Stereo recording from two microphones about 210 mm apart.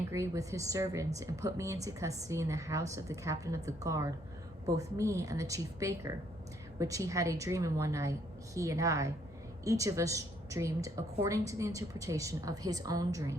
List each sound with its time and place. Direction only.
0.1 s a woman's voice: 15° right (ahead or behind)